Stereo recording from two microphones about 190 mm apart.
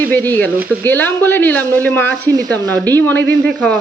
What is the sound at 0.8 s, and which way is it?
Speech, 10° left (ahead or behind).